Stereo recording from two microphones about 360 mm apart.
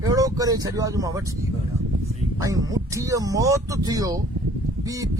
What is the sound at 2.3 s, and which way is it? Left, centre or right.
Speech, centre.